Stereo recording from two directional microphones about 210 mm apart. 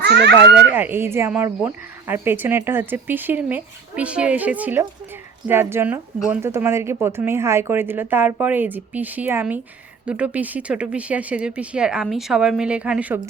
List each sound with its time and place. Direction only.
0.0 s a child's voice: 55° right (ahead or behind)
0.5 s speech: 10° right (ahead or behind)